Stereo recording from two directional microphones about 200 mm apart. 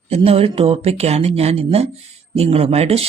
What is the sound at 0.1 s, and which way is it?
Speech, 30° right (ahead or behind).